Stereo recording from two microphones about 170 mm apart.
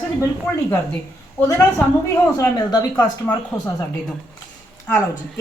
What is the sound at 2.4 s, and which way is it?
Speech, 25° left (ahead or behind).